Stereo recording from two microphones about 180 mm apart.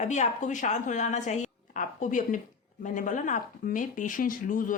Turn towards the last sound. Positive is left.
turn(degrees=50)  # may be behind; listen again after turning